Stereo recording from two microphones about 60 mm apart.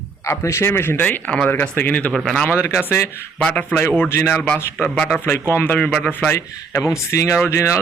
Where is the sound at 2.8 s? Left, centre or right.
Left.